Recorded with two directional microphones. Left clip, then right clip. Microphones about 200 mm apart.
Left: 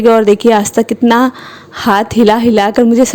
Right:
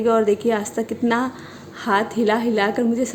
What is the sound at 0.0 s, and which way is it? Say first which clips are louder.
A woman's voice: left 10 dB; 50° left (ahead or behind).